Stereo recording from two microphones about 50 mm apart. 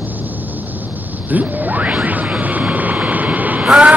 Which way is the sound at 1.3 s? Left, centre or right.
Right.